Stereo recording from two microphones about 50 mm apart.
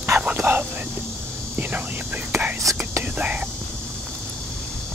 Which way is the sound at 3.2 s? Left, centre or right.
Right.